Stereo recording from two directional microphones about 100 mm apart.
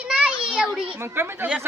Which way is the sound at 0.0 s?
10° right (ahead or behind).